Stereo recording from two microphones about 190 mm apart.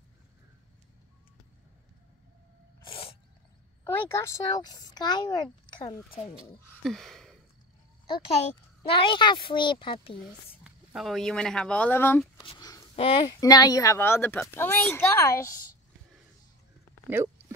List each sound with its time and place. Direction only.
2.8 s a sound: 30° left (ahead or behind)
3.8 s speech: 15° left (ahead or behind)
6.8 s a sound: centre (ahead or behind)
8.8 s a child's voice: 25° left (ahead or behind)
10.6 s speech: 5° right (ahead or behind)
12.4 s a sound: 20° left (ahead or behind)
12.9 s speech: 30° left (ahead or behind)
13.4 s a woman's voice: 20° left (ahead or behind)
17.2 s speech: 15° right (ahead or behind)